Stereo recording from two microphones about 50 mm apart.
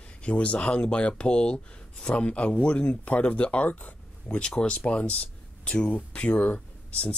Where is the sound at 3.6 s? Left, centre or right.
Left.